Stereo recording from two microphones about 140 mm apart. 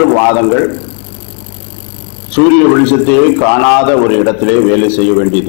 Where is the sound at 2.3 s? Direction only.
10° left (ahead or behind).